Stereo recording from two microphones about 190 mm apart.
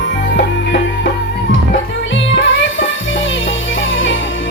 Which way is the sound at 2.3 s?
80° left.